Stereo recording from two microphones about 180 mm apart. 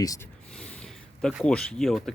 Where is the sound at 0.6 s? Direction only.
5° left (ahead or behind).